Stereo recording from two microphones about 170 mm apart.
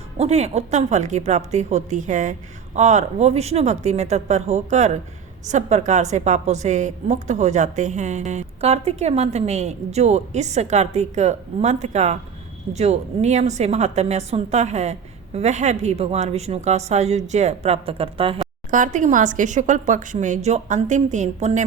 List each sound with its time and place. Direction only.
0.2 s a woman's voice: 40° right (ahead or behind)
18.7 s a woman's voice: 50° right (ahead or behind)